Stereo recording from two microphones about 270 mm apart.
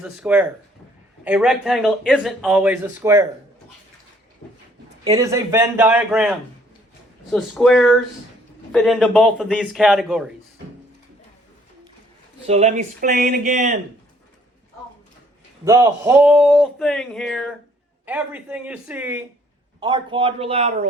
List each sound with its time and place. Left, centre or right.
0.0 s speech: centre
5.0 s a man's voice: centre
12.5 s speech: right
15.6 s speech: centre
19.8 s speech: centre